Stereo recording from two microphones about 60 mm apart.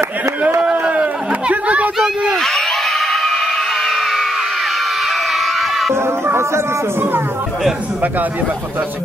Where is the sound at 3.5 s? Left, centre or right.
Centre.